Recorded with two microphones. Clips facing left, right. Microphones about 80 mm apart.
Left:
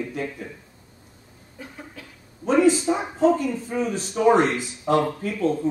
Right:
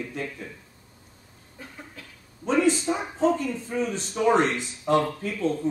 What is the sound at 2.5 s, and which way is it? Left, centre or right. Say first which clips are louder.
Speech: left 4 dB; centre.